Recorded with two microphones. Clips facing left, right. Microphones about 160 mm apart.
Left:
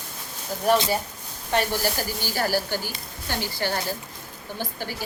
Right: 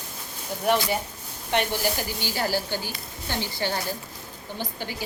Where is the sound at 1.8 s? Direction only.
15° right (ahead or behind).